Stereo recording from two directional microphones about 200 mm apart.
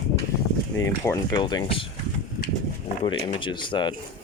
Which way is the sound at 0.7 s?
15° left (ahead or behind).